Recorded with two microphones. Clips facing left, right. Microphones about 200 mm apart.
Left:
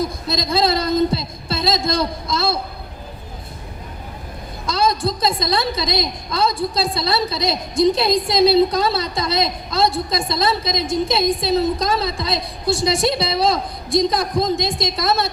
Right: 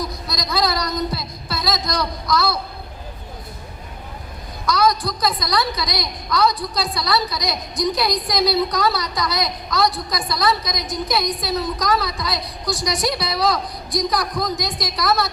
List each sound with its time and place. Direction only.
0.0 s a woman's voice: 25° left (ahead or behind)
4.6 s a woman's voice: 25° left (ahead or behind)